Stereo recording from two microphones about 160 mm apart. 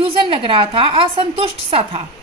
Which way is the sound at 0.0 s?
30° right (ahead or behind).